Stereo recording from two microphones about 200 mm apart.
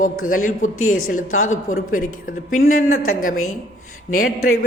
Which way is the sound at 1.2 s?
90° left.